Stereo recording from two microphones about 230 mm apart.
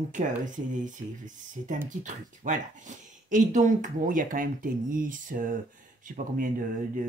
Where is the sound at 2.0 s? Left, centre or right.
Right.